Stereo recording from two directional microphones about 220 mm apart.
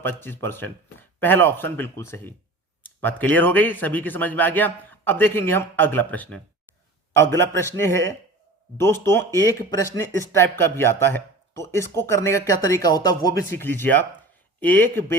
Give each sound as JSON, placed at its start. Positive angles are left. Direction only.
{"t": 0.0, "sound": "speech", "side_deg": 10}